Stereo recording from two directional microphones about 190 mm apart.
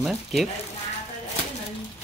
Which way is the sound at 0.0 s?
Centre (ahead or behind).